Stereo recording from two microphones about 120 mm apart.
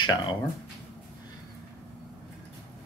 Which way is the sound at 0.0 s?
40° left (ahead or behind).